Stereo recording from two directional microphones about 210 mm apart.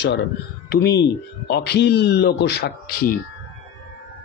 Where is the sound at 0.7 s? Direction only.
50° left (ahead or behind).